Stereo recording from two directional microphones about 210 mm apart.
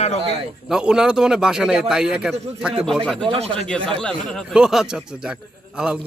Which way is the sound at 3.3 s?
25° right (ahead or behind).